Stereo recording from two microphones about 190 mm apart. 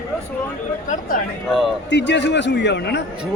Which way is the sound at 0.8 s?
40° left (ahead or behind).